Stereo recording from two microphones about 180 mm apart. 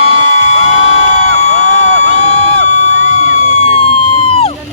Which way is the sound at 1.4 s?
35° left (ahead or behind).